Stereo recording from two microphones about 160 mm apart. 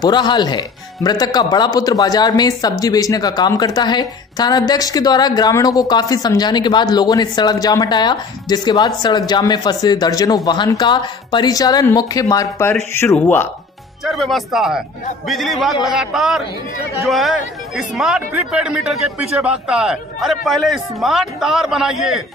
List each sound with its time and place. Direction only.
0.0 s speech: 25° left (ahead or behind)
14.0 s speech: centre (ahead or behind)